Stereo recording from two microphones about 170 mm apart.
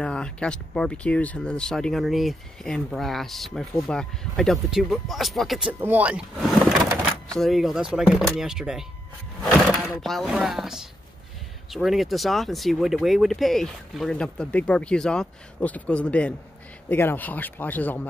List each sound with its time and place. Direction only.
0.0 s speech: 5° left (ahead or behind)